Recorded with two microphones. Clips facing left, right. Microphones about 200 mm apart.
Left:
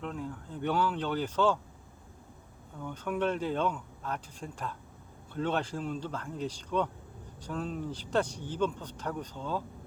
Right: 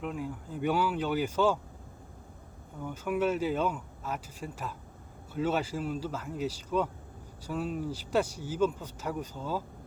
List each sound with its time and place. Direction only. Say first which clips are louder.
0.0 s speech: right 2 dB; 10° right (ahead or behind)
2.8 s speech: right 2 dB; 5° right (ahead or behind)